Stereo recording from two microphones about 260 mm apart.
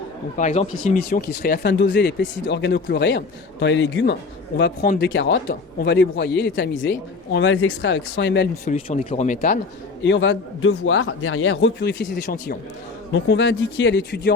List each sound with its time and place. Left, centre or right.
0.3 s speech: left
8.6 s speech: left
10.0 s speech: left